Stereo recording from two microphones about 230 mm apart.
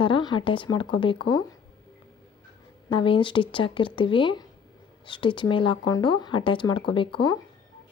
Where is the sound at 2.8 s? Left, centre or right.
Left.